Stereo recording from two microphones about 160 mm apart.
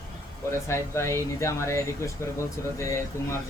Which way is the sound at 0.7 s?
15° left (ahead or behind).